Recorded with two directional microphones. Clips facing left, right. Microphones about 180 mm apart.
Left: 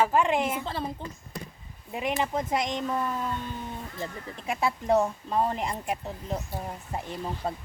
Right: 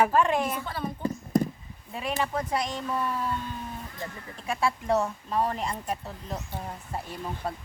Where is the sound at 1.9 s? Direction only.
20° left (ahead or behind).